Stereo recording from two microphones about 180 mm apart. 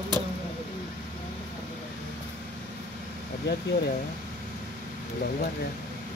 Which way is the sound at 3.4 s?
65° left (ahead or behind).